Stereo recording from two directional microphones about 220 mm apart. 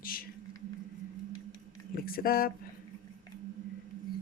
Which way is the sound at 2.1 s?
40° left (ahead or behind).